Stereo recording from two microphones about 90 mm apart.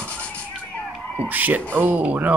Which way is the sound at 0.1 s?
15° left (ahead or behind).